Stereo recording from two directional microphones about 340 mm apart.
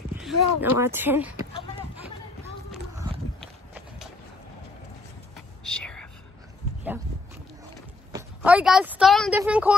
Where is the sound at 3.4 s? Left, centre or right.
Centre.